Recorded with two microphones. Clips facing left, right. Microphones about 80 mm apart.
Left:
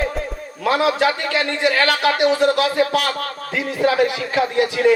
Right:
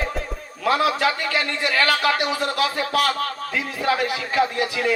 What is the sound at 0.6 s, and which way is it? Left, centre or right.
A man's voice, left.